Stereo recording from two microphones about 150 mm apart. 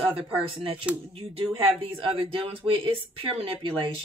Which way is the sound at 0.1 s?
40° right (ahead or behind).